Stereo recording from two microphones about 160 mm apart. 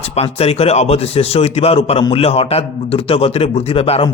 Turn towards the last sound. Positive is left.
turn(degrees=35)  # may be behind; listen again after turning